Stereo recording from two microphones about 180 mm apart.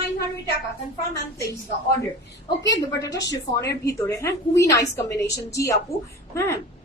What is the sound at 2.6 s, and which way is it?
A woman's voice, 20° left (ahead or behind).